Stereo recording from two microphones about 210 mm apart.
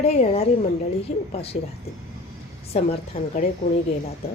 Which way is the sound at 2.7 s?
30° left (ahead or behind).